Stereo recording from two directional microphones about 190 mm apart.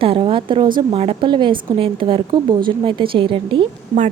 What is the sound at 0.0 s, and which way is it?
A woman's voice, 30° right (ahead or behind).